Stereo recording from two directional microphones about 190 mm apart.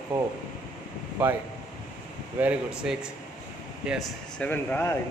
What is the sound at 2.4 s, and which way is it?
Speech, 5° right (ahead or behind).